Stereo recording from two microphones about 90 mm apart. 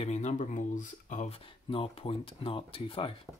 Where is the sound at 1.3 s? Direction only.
85° left.